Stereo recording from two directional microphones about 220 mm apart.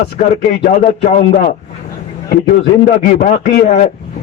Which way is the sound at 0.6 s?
40° left (ahead or behind).